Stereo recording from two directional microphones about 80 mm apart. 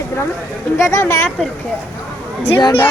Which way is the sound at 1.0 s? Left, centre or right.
Left.